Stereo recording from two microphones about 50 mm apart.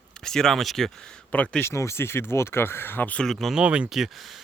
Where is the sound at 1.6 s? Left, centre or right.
Left.